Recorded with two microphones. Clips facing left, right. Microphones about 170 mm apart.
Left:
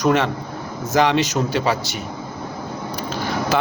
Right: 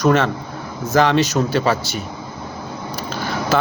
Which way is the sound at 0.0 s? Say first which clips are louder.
Right 2 dB; 15° left (ahead or behind).